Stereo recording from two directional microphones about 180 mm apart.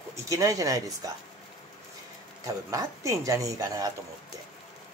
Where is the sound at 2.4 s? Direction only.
20° right (ahead or behind).